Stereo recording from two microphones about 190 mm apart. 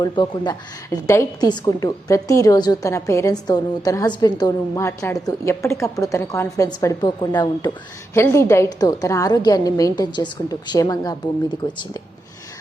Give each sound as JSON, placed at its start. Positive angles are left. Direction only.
{"t": 0.0, "sound": "a woman's voice", "side_deg": 20}